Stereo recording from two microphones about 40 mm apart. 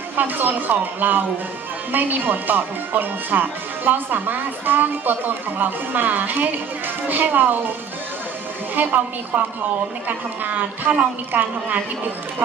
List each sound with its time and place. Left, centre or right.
0.2 s speech: right
8.7 s speech: right